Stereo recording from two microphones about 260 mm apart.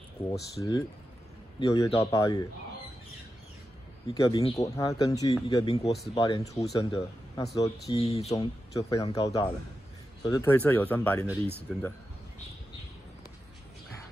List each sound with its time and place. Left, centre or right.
0.3 s speech: centre
4.1 s speech: centre
7.9 s speech: left
8.7 s speech: centre